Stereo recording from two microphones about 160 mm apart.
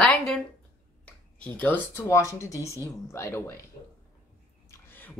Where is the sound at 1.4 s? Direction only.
10° left (ahead or behind).